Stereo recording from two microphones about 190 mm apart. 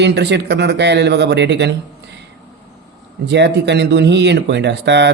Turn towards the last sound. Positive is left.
turn(degrees=-65)  # may be behind; listen again after turning